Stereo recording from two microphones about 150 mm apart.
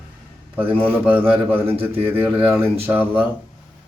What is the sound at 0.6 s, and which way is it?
Speech, 35° right (ahead or behind).